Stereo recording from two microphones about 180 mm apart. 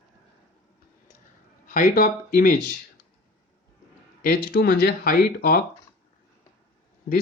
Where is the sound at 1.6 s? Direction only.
50° left (ahead or behind).